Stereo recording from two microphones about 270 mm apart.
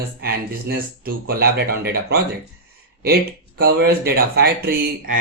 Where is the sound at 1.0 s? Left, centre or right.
Right.